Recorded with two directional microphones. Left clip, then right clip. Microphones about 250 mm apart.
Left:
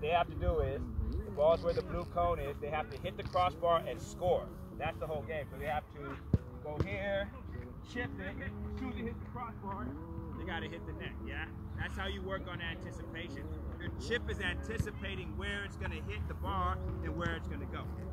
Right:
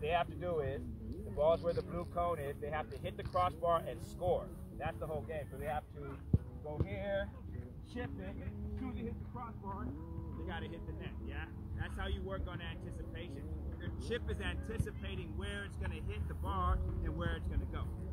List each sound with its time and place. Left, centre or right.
0.0 s speech: right
6.9 s speech: right
13.8 s speech: centre